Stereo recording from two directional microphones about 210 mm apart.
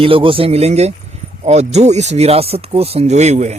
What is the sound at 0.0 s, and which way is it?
Speech, 25° right (ahead or behind).